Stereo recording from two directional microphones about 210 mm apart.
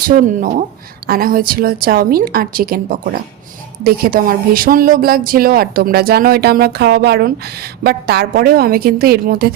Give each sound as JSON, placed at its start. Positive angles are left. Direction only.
{"t": 0.3, "sound": "a woman's voice", "side_deg": -40}